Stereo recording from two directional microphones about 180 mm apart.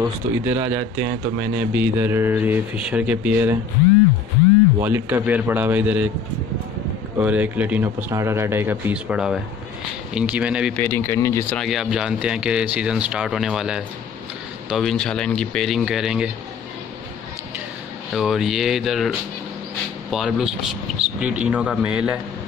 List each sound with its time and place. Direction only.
0.0 s speech: 15° right (ahead or behind)
4.8 s speech: 10° right (ahead or behind)
7.2 s speech: 10° right (ahead or behind)
10.8 s speech: 10° left (ahead or behind)
11.5 s speech: centre (ahead or behind)
18.1 s speech: centre (ahead or behind)